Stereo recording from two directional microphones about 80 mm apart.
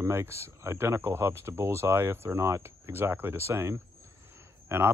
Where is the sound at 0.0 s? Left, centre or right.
Right.